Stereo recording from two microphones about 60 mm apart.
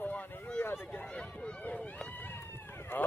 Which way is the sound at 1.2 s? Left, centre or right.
Centre.